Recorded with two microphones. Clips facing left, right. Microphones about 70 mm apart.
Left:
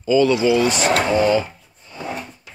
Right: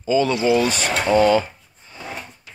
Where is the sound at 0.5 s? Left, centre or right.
Right.